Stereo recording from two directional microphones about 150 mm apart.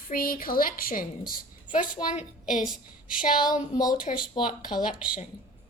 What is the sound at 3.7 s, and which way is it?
Speech, 25° left (ahead or behind).